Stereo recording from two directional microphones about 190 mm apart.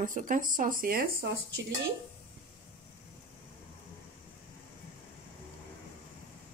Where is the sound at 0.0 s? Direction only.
45° right (ahead or behind).